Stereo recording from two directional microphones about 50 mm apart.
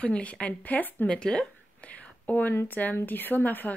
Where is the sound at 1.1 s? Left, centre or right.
Centre; by 2.5 s left.